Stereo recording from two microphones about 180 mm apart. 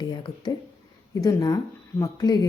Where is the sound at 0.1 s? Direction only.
25° left (ahead or behind).